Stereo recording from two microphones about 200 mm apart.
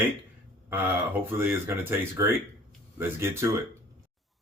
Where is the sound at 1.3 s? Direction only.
10° right (ahead or behind).